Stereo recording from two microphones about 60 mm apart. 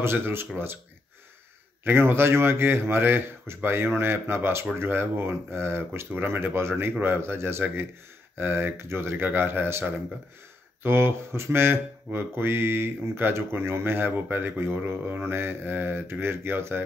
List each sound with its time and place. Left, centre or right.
0.0 s speech: right
1.9 s speech: right